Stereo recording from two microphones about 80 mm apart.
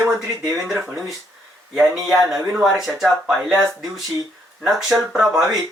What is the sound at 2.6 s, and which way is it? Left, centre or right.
Speech, centre.